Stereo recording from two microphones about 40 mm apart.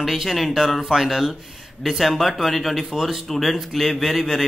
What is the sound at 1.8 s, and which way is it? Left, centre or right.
Speech, centre.